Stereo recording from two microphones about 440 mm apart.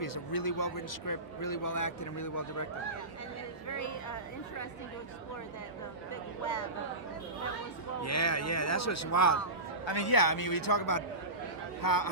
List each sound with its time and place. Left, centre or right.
0.0 s a man's voice: left
3.7 s speech: left
8.0 s speech: left
9.8 s a man's voice: left